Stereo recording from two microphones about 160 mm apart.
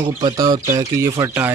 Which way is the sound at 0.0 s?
25° right (ahead or behind).